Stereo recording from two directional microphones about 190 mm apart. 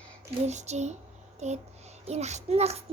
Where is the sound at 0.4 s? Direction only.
35° right (ahead or behind).